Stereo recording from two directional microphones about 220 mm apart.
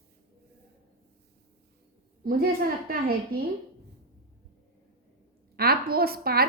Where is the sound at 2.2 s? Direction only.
45° right (ahead or behind).